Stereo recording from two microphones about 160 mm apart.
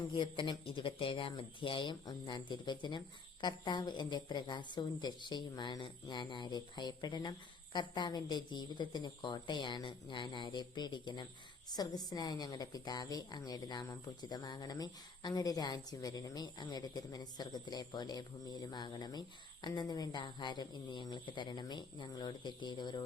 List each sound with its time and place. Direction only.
0.1 s a woman's voice: 30° left (ahead or behind)